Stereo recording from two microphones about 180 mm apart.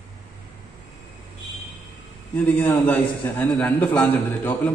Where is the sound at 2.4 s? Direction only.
10° left (ahead or behind).